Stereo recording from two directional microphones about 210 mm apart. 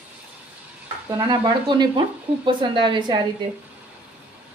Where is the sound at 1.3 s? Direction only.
20° right (ahead or behind).